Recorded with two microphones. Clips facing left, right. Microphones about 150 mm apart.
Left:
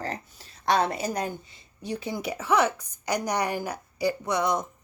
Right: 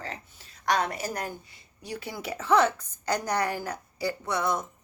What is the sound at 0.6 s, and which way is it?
A woman's voice, 25° left (ahead or behind).